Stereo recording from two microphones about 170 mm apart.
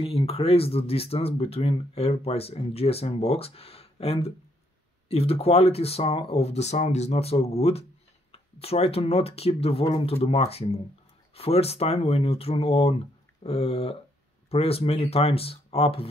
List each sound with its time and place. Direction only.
0.0 s speech: 35° left (ahead or behind)